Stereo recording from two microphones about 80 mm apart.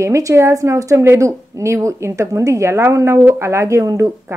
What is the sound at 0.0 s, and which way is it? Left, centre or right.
A woman's voice, right.